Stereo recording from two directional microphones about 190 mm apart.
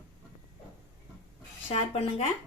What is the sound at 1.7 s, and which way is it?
Speech, 35° left (ahead or behind).